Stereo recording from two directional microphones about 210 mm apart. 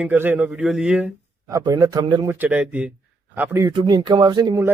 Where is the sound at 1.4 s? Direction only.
15° right (ahead or behind).